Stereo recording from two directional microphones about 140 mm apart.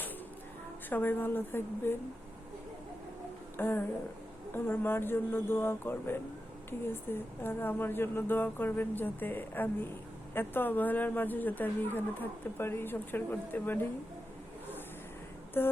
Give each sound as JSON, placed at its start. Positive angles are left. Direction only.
{"t": 0.9, "sound": "speech", "side_deg": 15}
{"t": 3.6, "sound": "speech", "side_deg": 15}
{"t": 15.6, "sound": "speech", "side_deg": 15}